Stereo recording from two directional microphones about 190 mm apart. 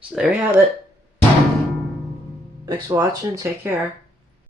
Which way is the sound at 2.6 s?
20° right (ahead or behind).